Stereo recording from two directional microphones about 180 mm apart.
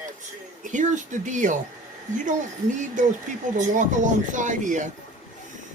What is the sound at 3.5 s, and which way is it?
Speech, 45° right (ahead or behind).